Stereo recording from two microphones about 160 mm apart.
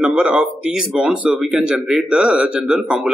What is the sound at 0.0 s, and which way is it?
Speech, 5° right (ahead or behind).